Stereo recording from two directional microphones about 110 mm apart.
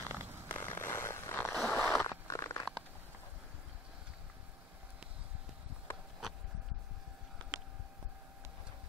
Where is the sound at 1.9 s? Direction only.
25° left (ahead or behind).